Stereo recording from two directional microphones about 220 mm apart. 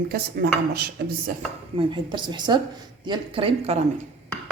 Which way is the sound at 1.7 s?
20° right (ahead or behind).